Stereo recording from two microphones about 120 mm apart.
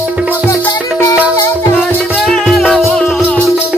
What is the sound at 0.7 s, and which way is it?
Music, 20° left (ahead or behind).